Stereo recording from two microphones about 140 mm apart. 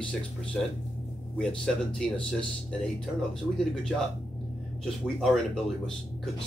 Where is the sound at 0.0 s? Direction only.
5° left (ahead or behind).